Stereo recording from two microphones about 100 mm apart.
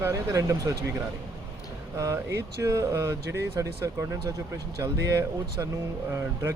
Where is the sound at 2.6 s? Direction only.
30° right (ahead or behind).